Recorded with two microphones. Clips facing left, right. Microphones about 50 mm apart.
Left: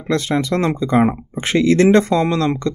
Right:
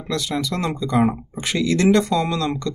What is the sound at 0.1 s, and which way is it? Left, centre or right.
Speech, left.